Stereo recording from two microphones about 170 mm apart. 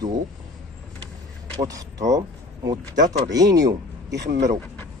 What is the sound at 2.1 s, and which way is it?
Speech, 20° right (ahead or behind).